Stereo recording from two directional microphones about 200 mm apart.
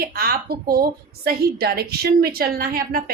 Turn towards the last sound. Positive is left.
turn(degrees=-45)  # may be behind; listen again after turning